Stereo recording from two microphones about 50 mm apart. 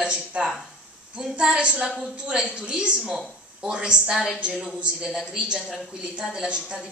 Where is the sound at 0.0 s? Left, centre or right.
Right.